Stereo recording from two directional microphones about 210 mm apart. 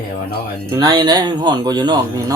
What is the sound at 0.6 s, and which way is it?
Speech, 20° right (ahead or behind).